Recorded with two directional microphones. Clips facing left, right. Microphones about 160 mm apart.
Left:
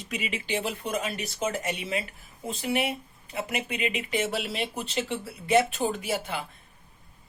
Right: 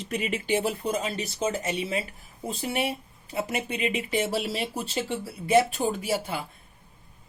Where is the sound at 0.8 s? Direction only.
30° right (ahead or behind).